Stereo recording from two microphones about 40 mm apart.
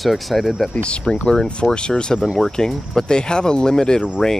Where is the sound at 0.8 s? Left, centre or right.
Left.